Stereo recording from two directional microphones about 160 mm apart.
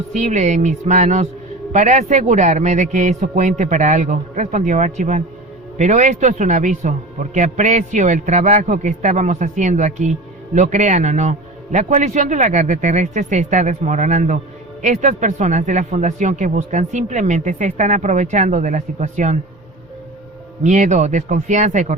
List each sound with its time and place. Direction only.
0.1 s a man's voice: 45° right (ahead or behind)
20.7 s a man's voice: 50° right (ahead or behind)